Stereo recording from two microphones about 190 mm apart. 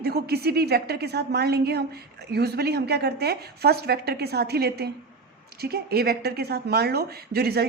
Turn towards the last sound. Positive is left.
turn(degrees=-55)  # may be behind; listen again after turning